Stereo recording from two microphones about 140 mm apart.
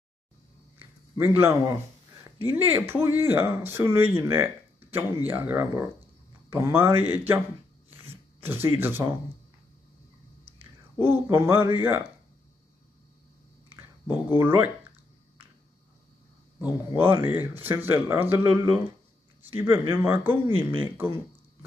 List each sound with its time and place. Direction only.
1.1 s a man's voice: 15° right (ahead or behind)
10.6 s speech: 15° right (ahead or behind)
13.7 s speech: 15° right (ahead or behind)
16.5 s speech: 15° right (ahead or behind)